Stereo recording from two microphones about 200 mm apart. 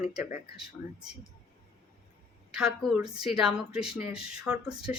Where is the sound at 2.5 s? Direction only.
5° right (ahead or behind).